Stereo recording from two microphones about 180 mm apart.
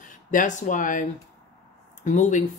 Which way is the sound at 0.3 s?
45° left (ahead or behind).